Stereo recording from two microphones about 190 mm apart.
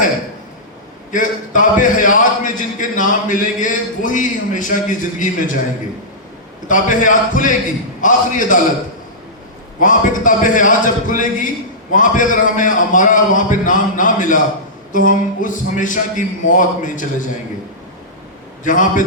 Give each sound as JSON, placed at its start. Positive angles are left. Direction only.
{"t": 1.1, "sound": "speech", "side_deg": 45}
{"t": 6.7, "sound": "speech", "side_deg": 45}
{"t": 9.8, "sound": "speech", "side_deg": 45}
{"t": 18.6, "sound": "speech", "side_deg": 45}